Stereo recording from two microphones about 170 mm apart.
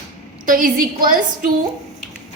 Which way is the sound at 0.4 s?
55° right (ahead or behind).